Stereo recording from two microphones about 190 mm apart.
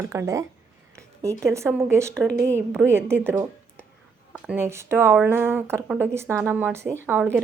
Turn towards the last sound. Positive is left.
turn(degrees=-10)  # may be behind; listen again after turning